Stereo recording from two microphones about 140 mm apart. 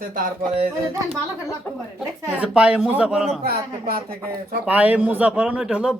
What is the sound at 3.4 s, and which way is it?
Speech, 90° right.